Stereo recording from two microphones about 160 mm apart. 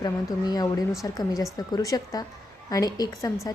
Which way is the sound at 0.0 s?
25° left (ahead or behind).